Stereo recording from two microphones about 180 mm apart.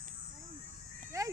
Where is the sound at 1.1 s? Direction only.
15° right (ahead or behind).